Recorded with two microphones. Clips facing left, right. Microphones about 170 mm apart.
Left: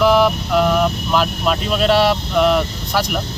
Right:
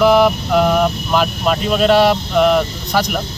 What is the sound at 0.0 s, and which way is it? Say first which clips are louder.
Vehicle: right 2 dB; centre (ahead or behind).